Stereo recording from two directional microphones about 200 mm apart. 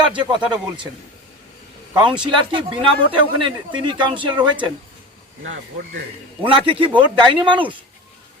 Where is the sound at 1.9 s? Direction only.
20° right (ahead or behind).